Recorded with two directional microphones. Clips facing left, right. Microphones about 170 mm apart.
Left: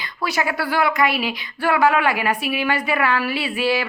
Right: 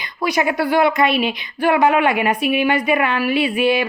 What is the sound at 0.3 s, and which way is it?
A woman's voice, 20° right (ahead or behind).